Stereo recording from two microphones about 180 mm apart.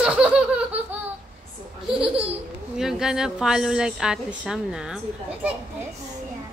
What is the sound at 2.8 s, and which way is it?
A woman's voice, 5° right (ahead or behind).